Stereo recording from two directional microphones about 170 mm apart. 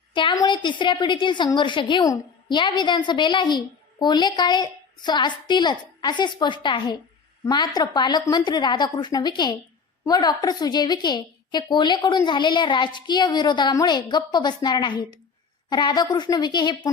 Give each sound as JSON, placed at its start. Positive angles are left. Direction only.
{"t": 0.1, "sound": "a woman's voice", "side_deg": 30}